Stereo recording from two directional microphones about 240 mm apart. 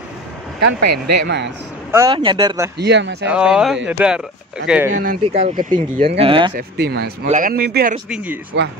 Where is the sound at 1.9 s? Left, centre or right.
Centre.